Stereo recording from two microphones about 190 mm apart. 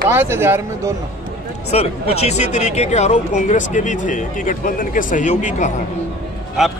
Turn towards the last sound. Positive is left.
turn(degrees=0)  # may be behind; listen again after turning